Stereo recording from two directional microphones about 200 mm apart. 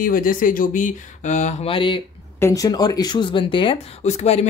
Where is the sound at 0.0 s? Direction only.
45° left (ahead or behind).